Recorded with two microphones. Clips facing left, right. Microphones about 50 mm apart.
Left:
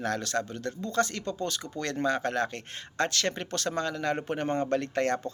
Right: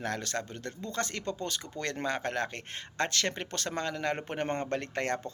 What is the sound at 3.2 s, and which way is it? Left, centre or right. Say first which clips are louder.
Speech: left 3 dB; centre.